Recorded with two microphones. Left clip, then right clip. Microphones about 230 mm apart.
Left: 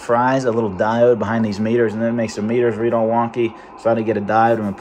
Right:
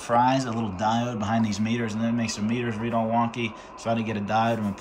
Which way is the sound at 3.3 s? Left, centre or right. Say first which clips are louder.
Left 10 dB; left.